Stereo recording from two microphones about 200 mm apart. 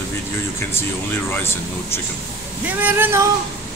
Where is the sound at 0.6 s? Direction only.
10° left (ahead or behind).